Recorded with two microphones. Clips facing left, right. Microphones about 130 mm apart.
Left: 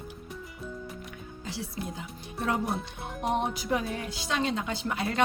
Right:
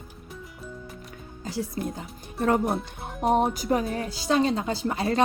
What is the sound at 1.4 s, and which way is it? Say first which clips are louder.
Speech: right 6 dB; 45° right (ahead or behind).